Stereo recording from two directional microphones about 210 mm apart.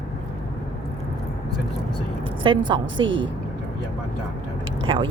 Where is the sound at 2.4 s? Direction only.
25° right (ahead or behind).